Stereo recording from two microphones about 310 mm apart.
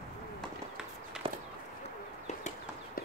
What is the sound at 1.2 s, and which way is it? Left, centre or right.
Clip-clop, centre.